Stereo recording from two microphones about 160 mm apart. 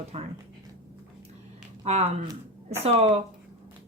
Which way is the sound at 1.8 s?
45° right (ahead or behind).